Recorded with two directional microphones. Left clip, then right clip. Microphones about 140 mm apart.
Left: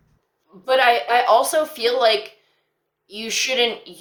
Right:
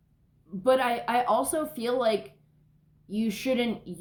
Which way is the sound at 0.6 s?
15° left (ahead or behind).